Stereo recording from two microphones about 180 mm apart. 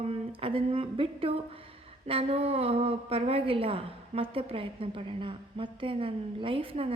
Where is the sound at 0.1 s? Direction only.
30° right (ahead or behind).